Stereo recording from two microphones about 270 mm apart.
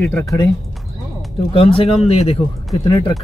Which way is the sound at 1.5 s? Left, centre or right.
Centre.